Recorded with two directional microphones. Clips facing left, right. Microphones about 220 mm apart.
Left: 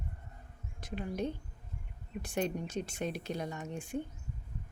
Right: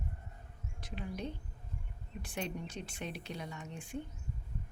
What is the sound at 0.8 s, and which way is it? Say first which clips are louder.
Speech: left 4 dB; 50° left (ahead or behind).